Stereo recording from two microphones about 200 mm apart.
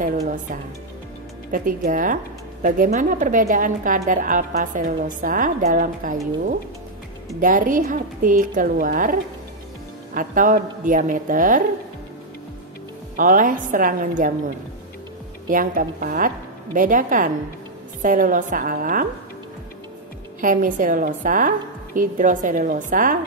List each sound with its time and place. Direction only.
1.5 s a woman's voice: 45° right (ahead or behind)
7.3 s a woman's voice: 45° right (ahead or behind)
13.1 s a woman's voice: 40° right (ahead or behind)
15.4 s a woman's voice: 45° right (ahead or behind)
20.3 s a woman's voice: 40° right (ahead or behind)